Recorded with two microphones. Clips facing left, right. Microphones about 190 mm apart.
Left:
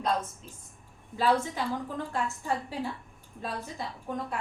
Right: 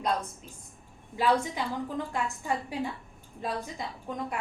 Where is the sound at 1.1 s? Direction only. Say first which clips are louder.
Even; 15° right (ahead or behind).